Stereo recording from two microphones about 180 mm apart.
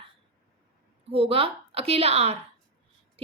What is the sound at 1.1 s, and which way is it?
A woman's voice, 35° right (ahead or behind).